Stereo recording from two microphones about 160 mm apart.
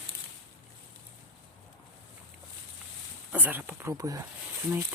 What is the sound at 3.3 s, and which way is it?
Speech, 10° right (ahead or behind).